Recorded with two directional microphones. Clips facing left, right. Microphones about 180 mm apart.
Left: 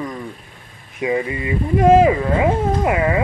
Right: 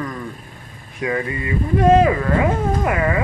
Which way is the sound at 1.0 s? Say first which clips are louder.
Left 2 dB; 15° left (ahead or behind).